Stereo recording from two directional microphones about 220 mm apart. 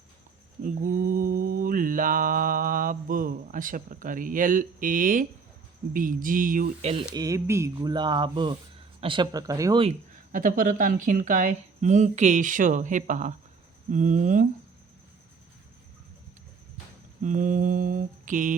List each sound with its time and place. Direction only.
0.6 s mantra: 40° right (ahead or behind)
5.9 s speech: 40° right (ahead or behind)
7.1 s speech: 15° right (ahead or behind)
10.3 s speech: 40° right (ahead or behind)
17.2 s speech: 35° right (ahead or behind)